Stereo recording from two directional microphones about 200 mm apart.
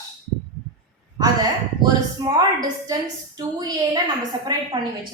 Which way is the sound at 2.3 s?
20° right (ahead or behind).